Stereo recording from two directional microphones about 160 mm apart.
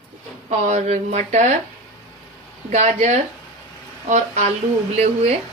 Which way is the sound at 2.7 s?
45° right (ahead or behind).